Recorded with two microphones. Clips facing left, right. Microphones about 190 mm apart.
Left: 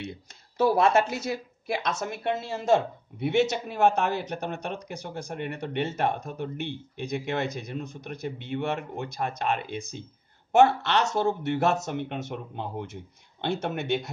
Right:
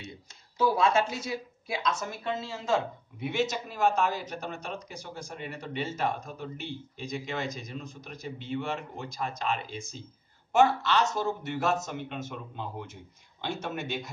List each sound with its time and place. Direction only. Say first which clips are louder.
0.6 s speech: left 3 dB; 65° left (ahead or behind)